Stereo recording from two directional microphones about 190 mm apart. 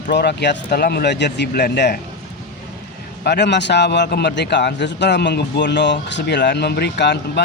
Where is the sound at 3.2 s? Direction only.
65° left (ahead or behind).